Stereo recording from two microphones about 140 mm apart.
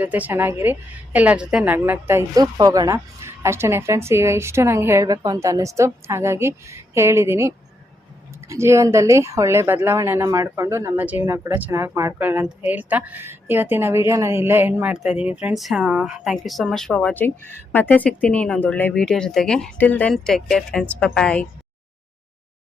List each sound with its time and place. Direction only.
0.0 s a woman's voice: 10° right (ahead or behind); by 21.4 s 5° left (ahead or behind)